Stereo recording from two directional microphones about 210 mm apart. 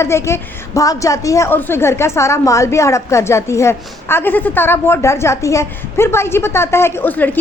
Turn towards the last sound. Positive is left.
turn(degrees=10)  # may be behind; listen again after turning